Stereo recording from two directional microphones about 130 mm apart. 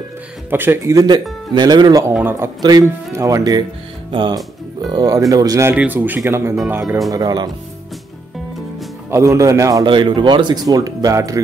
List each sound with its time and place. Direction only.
0.5 s speech: 15° right (ahead or behind)
5.8 s speech: 15° right (ahead or behind); by 7.5 s 30° right (ahead or behind)
9.1 s speech: 25° right (ahead or behind)
9.8 s speech: 40° right (ahead or behind)